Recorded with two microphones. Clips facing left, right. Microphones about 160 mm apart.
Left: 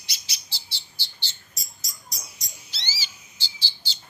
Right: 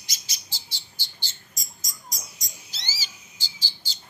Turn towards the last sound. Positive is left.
turn(degrees=-45)  # may be behind; listen again after turning